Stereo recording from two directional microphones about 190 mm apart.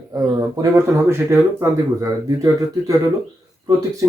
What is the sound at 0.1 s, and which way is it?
Speech, 20° right (ahead or behind).